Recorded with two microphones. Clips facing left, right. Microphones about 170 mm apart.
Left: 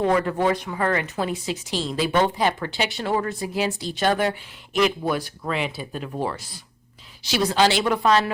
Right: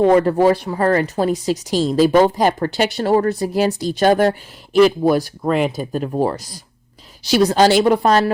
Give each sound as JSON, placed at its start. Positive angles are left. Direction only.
{"t": 0.0, "sound": "a woman's voice", "side_deg": -35}